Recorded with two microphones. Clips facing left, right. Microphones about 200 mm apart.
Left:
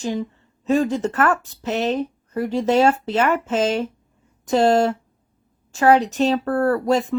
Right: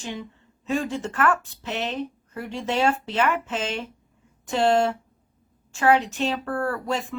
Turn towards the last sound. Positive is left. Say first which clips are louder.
# left 9 dB
turn(degrees=40)  # may be behind; listen again after turning